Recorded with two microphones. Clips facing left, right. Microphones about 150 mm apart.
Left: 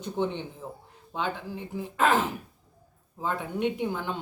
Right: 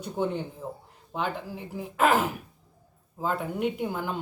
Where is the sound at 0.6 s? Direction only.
20° right (ahead or behind).